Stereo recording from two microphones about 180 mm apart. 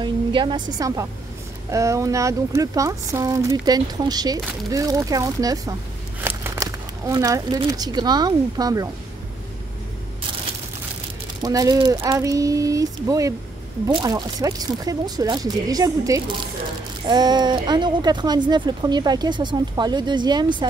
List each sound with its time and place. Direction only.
0.0 s a woman's voice: 25° right (ahead or behind)
11.4 s speech: 20° right (ahead or behind)